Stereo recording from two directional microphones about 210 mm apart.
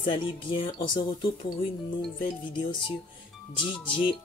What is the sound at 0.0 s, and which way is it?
Speech, 25° left (ahead or behind).